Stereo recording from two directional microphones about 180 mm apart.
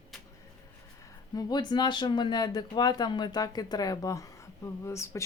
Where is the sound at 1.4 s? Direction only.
20° left (ahead or behind).